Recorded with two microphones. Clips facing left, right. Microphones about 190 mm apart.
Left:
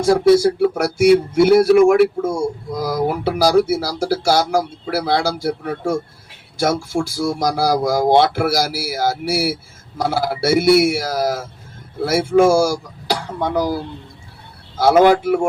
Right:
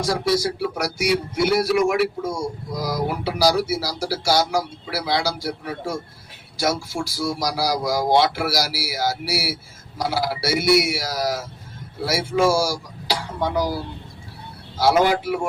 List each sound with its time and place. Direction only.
0.0 s speech: 55° left (ahead or behind)